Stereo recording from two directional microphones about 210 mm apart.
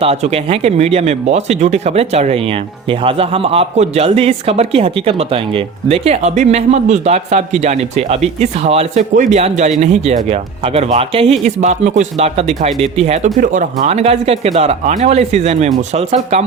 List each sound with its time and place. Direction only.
0.0 s speech: 30° right (ahead or behind)